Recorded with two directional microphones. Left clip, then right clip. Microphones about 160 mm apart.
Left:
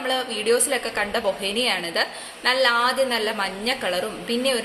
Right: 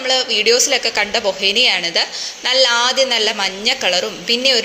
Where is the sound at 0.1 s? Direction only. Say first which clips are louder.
Right 8 dB; 10° right (ahead or behind).